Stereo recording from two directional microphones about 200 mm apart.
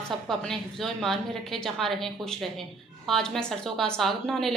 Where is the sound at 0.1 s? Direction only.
Centre (ahead or behind).